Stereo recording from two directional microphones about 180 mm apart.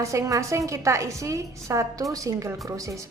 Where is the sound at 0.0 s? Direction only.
15° right (ahead or behind).